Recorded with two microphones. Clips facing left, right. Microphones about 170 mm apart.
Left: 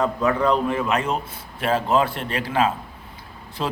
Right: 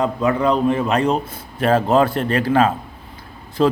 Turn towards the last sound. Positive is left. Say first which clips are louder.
# right 10 dB
turn(degrees=-40)  # may be behind; listen again after turning